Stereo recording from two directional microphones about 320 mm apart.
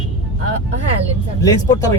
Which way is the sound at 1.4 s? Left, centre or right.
Centre.